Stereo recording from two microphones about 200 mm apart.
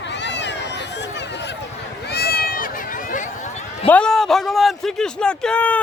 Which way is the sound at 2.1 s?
50° left (ahead or behind).